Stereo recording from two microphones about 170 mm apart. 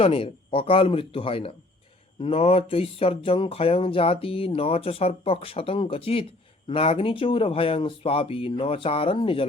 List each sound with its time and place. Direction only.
0.0 s speech: 35° left (ahead or behind)